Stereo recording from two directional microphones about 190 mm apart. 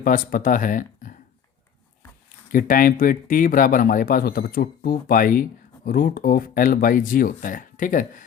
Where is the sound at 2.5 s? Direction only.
45° left (ahead or behind).